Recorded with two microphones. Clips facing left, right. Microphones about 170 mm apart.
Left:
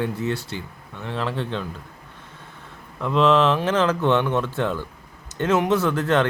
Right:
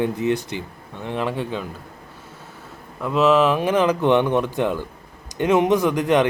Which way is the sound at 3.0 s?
5° right (ahead or behind).